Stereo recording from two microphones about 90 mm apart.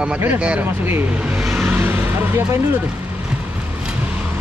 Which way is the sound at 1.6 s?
25° right (ahead or behind).